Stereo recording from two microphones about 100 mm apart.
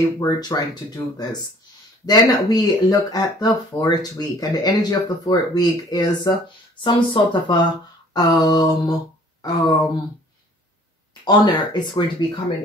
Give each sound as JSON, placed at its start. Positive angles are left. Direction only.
{"t": 0.0, "sound": "speech", "side_deg": 40}
{"t": 6.8, "sound": "speech", "side_deg": 55}
{"t": 8.1, "sound": "speech", "side_deg": 40}
{"t": 11.2, "sound": "speech", "side_deg": 45}